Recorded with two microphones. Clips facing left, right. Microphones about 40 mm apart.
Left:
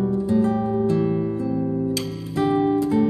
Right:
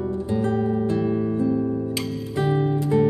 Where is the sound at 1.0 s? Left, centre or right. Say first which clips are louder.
Even; centre.